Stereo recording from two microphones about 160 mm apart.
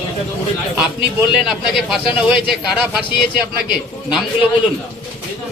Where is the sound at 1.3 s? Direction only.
5° right (ahead or behind).